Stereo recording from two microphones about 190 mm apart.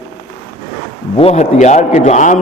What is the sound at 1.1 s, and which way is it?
A man's voice, 30° left (ahead or behind).